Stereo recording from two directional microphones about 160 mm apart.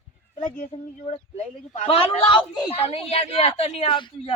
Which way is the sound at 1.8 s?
35° left (ahead or behind).